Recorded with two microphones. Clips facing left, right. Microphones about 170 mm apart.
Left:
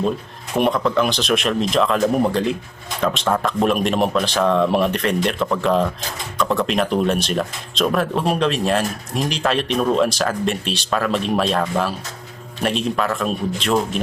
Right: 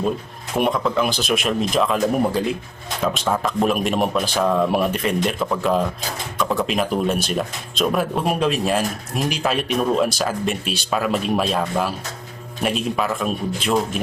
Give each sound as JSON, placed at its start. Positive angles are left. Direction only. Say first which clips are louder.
{"t": 0.6, "sound": "speech", "louder": "left 2 dB", "side_deg": 0}